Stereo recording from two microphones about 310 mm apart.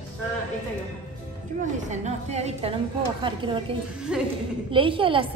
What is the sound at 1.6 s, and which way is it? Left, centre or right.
A woman's voice, right.